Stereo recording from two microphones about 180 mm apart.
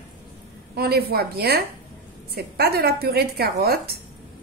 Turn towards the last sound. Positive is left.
turn(degrees=-60)  # may be behind; listen again after turning